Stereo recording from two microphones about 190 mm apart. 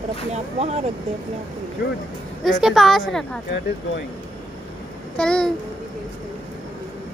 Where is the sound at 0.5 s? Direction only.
35° right (ahead or behind).